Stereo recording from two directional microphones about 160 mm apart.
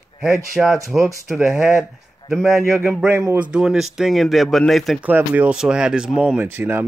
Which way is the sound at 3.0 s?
20° right (ahead or behind).